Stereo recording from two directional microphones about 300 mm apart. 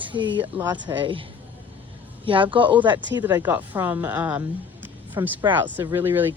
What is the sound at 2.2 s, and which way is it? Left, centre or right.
A man's voice, centre.